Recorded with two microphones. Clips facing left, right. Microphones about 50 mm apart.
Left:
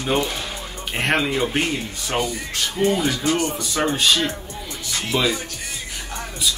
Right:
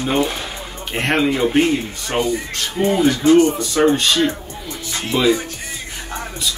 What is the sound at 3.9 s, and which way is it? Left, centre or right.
Speech, centre.